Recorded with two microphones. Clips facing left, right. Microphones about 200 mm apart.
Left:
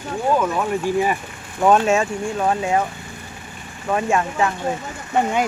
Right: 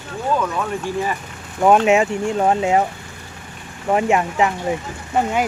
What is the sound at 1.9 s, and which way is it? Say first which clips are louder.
Speech: right 3 dB; 20° right (ahead or behind).